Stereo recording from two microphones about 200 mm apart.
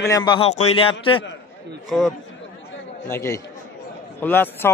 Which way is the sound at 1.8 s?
Centre (ahead or behind).